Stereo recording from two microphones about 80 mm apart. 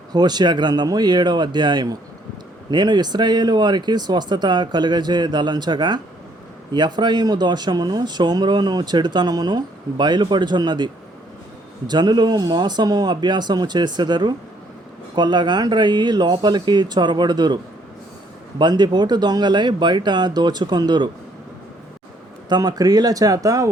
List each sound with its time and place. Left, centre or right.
0.1 s speech: right
18.6 s speech: right
22.4 s speech: right